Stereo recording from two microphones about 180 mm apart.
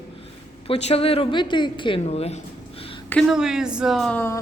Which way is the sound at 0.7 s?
35° left (ahead or behind).